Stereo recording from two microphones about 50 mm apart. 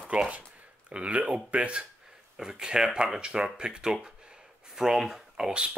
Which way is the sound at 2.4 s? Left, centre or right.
Centre.